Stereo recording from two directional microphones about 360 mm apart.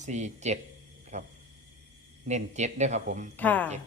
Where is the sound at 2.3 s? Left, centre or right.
Centre.